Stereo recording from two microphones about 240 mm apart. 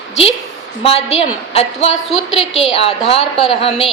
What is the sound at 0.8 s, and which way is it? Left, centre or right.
A woman's voice, left.